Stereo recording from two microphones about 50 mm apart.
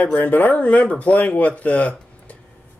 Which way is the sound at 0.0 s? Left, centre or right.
Left.